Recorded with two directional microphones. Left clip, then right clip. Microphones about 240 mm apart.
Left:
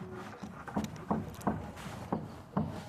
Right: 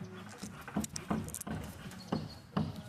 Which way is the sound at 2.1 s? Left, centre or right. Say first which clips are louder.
Left 1 dB; right.